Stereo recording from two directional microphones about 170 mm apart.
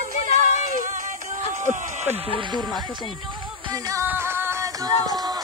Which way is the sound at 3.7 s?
15° right (ahead or behind).